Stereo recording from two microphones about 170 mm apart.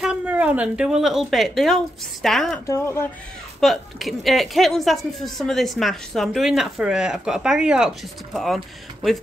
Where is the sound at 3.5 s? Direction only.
Centre (ahead or behind).